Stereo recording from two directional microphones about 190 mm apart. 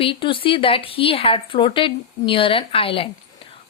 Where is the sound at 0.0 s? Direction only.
25° left (ahead or behind).